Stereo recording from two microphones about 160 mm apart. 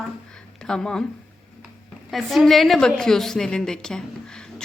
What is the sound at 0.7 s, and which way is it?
Speech, 5° left (ahead or behind).